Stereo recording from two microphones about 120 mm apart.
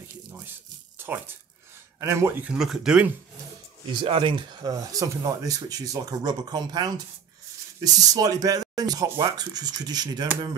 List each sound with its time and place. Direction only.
0.9 s speech: 15° right (ahead or behind)
2.4 s speech: 5° right (ahead or behind)
3.8 s speech: 45° right (ahead or behind)